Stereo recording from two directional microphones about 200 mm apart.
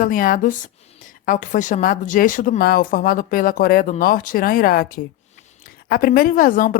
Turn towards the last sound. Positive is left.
turn(degrees=45)  # may be behind; listen again after turning